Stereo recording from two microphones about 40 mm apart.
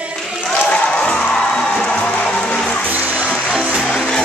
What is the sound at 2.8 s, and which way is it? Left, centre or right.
Music, right.